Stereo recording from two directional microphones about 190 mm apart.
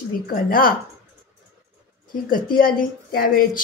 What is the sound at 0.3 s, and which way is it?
Speech, 50° left (ahead or behind).